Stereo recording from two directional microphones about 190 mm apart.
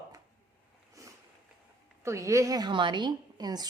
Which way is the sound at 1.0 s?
20° right (ahead or behind).